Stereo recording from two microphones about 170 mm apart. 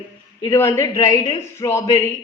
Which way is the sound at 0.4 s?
15° left (ahead or behind).